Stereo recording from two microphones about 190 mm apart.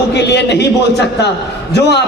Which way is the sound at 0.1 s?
65° left (ahead or behind).